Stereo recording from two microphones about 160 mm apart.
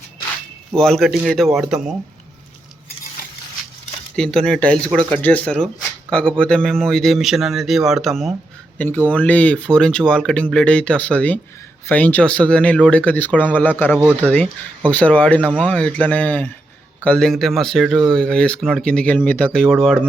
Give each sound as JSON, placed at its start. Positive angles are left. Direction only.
{"t": 0.8, "sound": "speech", "side_deg": 0}
{"t": 4.1, "sound": "speech", "side_deg": 5}